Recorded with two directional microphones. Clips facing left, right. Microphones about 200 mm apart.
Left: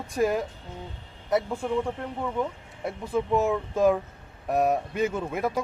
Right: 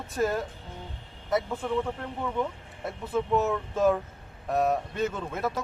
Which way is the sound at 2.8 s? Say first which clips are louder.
Left 2 dB; 10° left (ahead or behind).